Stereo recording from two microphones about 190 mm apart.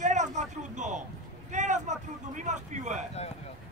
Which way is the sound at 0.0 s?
40° right (ahead or behind).